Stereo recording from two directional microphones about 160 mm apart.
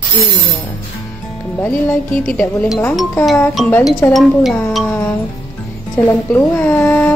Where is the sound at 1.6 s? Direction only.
10° left (ahead or behind).